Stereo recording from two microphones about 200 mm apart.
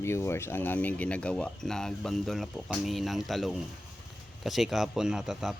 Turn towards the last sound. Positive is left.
turn(degrees=0)  # may be behind; listen again after turning